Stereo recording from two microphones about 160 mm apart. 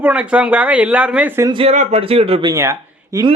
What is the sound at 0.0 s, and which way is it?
Speech, 10° right (ahead or behind).